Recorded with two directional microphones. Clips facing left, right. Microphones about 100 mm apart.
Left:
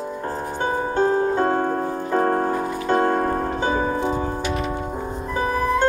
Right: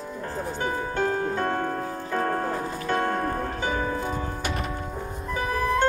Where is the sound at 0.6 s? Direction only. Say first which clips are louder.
Left 7 dB; 30° left (ahead or behind).